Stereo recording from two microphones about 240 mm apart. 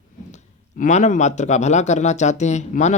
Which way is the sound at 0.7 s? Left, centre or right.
Left.